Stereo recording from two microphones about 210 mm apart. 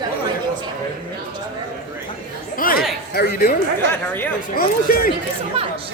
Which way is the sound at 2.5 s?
40° left (ahead or behind).